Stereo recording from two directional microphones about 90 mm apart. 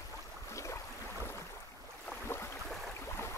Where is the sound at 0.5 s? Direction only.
35° left (ahead or behind).